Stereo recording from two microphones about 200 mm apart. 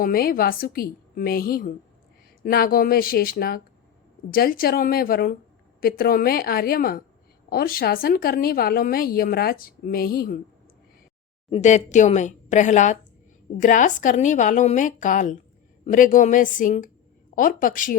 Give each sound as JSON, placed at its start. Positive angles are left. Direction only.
{"t": 0.0, "sound": "speech", "side_deg": 45}
{"t": 11.5, "sound": "a woman's voice", "side_deg": 35}